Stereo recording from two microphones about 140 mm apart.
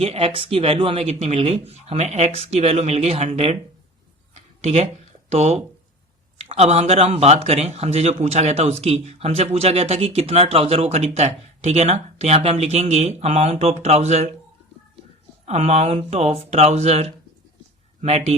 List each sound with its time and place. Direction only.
0.0 s speech: 45° right (ahead or behind)
4.4 s a sound: 50° right (ahead or behind)
5.3 s speech: 50° right (ahead or behind)
15.4 s speech: 50° right (ahead or behind)